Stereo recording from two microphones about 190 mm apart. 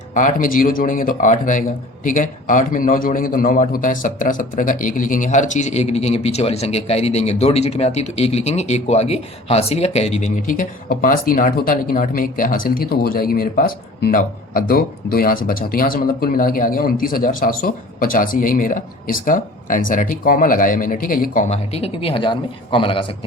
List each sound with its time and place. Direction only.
0.1 s a man's voice: 45° left (ahead or behind); by 23.1 s 25° left (ahead or behind)